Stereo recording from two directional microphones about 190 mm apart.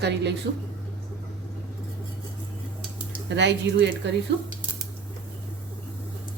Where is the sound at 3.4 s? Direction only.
70° right (ahead or behind).